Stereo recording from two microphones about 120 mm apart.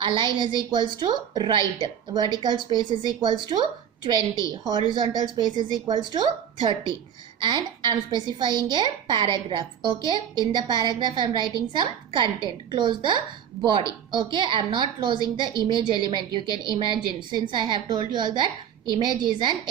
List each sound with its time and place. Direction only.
0.0 s a woman's voice: 40° right (ahead or behind)